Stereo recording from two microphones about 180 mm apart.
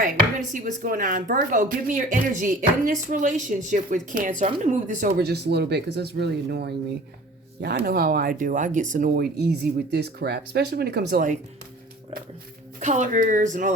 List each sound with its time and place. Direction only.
0.0 s speech: 45° right (ahead or behind)
5.1 s speech: 65° right (ahead or behind)
12.8 s speech: 40° right (ahead or behind)